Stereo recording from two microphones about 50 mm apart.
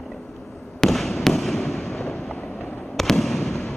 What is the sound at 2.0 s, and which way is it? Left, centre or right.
Fireworks, centre.